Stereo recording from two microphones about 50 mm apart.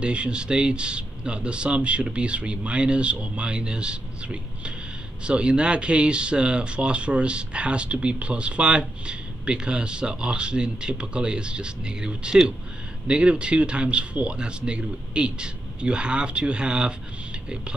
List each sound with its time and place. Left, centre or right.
0.0 s speech: right